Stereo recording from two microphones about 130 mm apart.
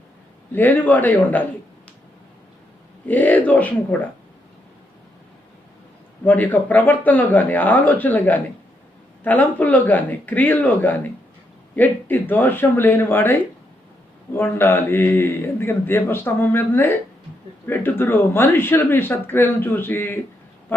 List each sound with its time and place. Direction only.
0.5 s a man's voice: 15° left (ahead or behind)
3.1 s a man's voice: 15° left (ahead or behind)
6.2 s a man's voice: 15° left (ahead or behind)
14.3 s a man's voice: 15° left (ahead or behind)